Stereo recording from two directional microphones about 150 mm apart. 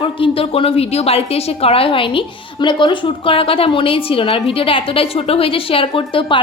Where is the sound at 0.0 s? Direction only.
35° left (ahead or behind).